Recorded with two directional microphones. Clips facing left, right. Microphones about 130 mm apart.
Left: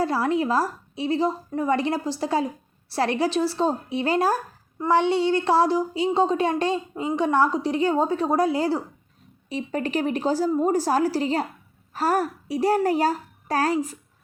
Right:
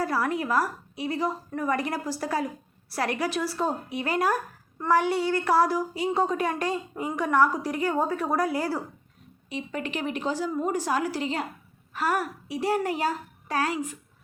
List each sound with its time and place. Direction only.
0.0 s speech: 25° left (ahead or behind)
9.5 s a woman's voice: 35° left (ahead or behind)